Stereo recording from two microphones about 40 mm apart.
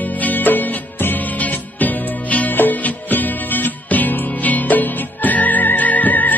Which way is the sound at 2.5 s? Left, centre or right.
Left.